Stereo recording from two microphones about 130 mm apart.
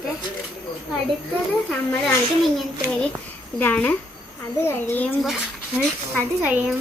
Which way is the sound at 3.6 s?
10° left (ahead or behind).